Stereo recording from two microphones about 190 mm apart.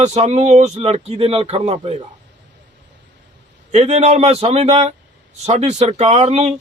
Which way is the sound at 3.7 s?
35° right (ahead or behind).